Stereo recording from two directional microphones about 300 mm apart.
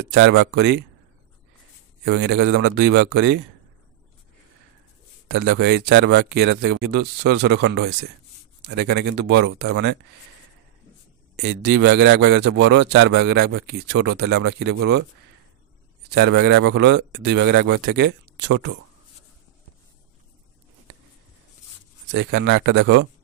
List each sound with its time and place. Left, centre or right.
0.0 s a man's voice: right
2.0 s a man's voice: right
5.3 s a man's voice: right
11.3 s a man's voice: right
16.1 s a man's voice: right
22.1 s a man's voice: right